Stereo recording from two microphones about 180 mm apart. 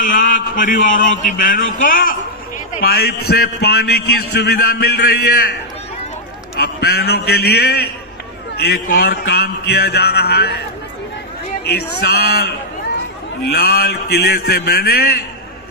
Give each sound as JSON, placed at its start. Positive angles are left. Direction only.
{"t": 0.0, "sound": "a man's voice", "side_deg": 45}
{"t": 2.8, "sound": "a man's voice", "side_deg": 60}
{"t": 6.6, "sound": "a man's voice", "side_deg": 60}
{"t": 11.6, "sound": "a man's voice", "side_deg": 65}